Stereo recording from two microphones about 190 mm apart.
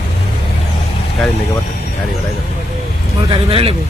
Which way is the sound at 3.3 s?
30° right (ahead or behind).